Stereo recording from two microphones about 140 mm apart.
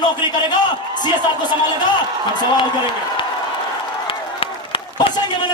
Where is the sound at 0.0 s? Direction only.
30° left (ahead or behind).